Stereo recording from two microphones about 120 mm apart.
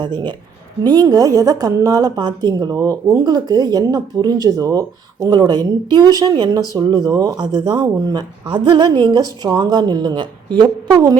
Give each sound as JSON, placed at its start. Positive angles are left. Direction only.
{"t": 0.0, "sound": "a woman's voice", "side_deg": -40}